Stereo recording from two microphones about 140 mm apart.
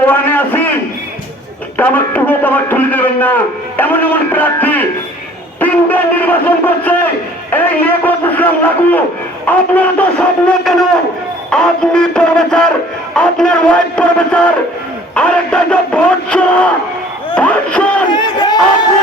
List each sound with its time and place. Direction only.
0.1 s a sound: 15° left (ahead or behind)
1.7 s a man's voice: 10° left (ahead or behind)
11.5 s music: 5° left (ahead or behind)
13.1 s a man's voice: 5° left (ahead or behind)
18.1 s speech: 30° left (ahead or behind)